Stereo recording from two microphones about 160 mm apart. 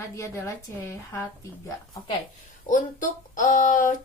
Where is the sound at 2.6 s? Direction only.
55° left (ahead or behind).